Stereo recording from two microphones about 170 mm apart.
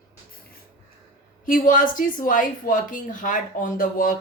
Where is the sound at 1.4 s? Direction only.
55° left (ahead or behind).